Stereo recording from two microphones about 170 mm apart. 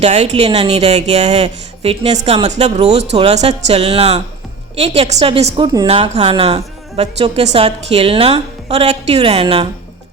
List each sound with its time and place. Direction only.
0.0 s a woman's voice: 40° right (ahead or behind)
5.6 s speech: 25° right (ahead or behind)
5.9 s a woman's voice: 40° right (ahead or behind)